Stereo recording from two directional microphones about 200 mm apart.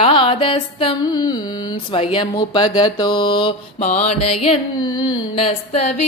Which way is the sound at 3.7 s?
35° left (ahead or behind).